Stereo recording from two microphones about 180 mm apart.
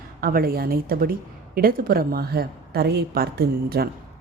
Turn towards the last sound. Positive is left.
turn(degrees=-60)  # may be behind; listen again after turning